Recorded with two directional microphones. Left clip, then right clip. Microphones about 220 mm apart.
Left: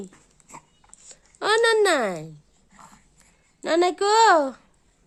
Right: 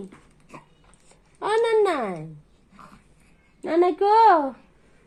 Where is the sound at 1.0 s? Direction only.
30° left (ahead or behind).